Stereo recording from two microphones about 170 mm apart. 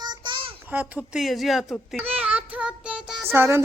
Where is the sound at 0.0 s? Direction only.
25° right (ahead or behind).